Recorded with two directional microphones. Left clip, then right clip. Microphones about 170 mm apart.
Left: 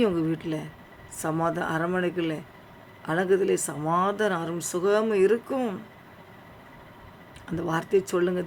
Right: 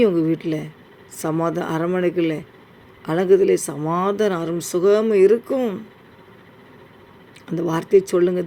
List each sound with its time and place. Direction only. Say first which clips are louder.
0.0 s speech: right 8 dB; 15° right (ahead or behind)
7.4 s speech: right 6 dB; 15° right (ahead or behind)